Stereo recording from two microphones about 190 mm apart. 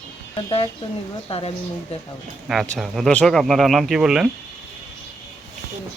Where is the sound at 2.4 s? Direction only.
5° left (ahead or behind).